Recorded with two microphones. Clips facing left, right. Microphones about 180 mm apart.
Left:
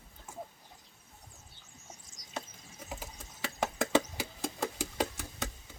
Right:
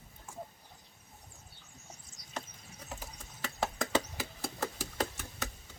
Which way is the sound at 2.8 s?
10° left (ahead or behind).